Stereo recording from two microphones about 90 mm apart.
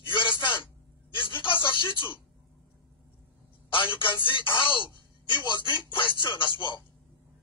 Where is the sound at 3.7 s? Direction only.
65° left (ahead or behind).